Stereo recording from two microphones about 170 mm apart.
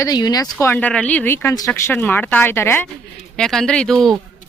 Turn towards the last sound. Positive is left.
turn(degrees=0)  # may be behind; listen again after turning